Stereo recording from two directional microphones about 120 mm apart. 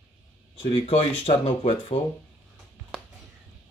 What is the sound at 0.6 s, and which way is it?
Speech, 50° left (ahead or behind).